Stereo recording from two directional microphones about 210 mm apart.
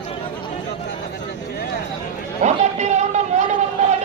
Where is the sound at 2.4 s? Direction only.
35° right (ahead or behind).